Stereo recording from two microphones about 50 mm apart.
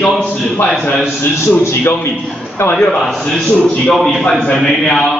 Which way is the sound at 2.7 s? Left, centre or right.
Centre.